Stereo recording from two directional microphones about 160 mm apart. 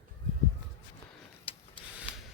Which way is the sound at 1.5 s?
35° left (ahead or behind).